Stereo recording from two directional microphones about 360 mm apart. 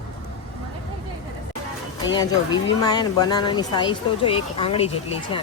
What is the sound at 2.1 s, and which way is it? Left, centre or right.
Speech, centre.